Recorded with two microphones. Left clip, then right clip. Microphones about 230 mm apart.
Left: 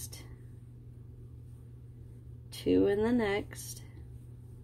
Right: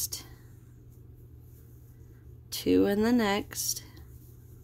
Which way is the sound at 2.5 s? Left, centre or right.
Right.